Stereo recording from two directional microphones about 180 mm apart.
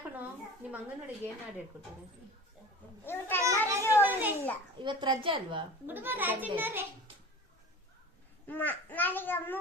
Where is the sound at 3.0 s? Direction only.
10° left (ahead or behind).